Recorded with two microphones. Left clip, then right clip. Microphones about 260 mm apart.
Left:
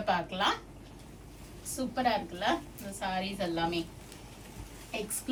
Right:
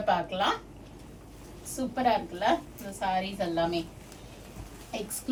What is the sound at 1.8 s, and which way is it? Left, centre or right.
A woman's voice, centre.